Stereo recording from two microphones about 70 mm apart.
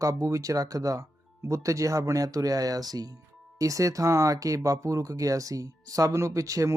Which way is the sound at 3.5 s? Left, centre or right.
Right.